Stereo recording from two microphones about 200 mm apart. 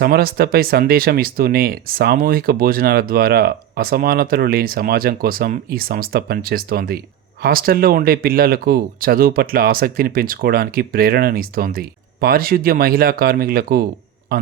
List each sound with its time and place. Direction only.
0.0 s speech: 50° right (ahead or behind)